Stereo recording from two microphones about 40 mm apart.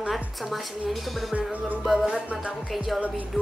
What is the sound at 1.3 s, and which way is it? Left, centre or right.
Music, right.